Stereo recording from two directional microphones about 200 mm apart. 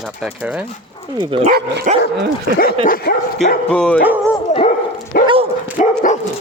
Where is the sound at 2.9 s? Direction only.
50° left (ahead or behind).